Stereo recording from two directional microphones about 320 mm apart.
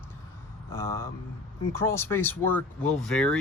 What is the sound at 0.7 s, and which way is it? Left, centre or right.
Speech, centre.